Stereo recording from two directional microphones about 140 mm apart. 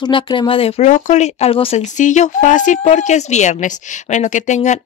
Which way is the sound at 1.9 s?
60° left (ahead or behind).